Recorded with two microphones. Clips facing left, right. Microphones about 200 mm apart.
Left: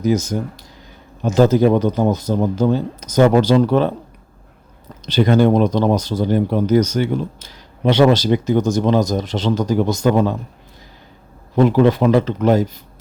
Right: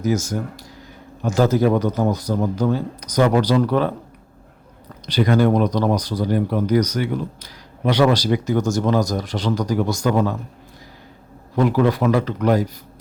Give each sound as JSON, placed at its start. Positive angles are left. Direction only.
{"t": 0.0, "sound": "speech", "side_deg": 20}
{"t": 5.0, "sound": "speech", "side_deg": 25}
{"t": 11.5, "sound": "speech", "side_deg": 25}